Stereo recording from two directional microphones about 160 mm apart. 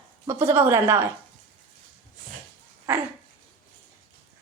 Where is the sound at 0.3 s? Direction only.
15° right (ahead or behind).